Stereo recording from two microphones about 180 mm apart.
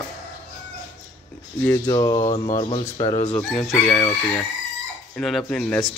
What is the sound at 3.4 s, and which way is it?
Speech, 5° left (ahead or behind).